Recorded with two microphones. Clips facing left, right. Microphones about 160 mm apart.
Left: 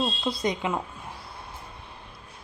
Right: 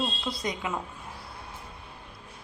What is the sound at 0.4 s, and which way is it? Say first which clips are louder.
Speech: left 5 dB; 25° left (ahead or behind).